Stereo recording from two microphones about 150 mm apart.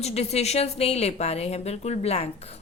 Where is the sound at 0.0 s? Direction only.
45° left (ahead or behind).